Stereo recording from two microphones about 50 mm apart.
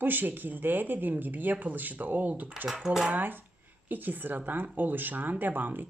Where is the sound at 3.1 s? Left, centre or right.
Right.